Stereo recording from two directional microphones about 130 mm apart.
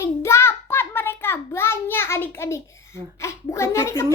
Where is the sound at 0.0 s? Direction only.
20° left (ahead or behind).